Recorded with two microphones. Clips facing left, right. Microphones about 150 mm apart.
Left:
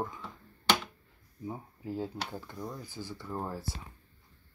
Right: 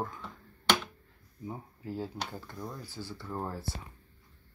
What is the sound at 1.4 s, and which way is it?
Speech, 5° left (ahead or behind).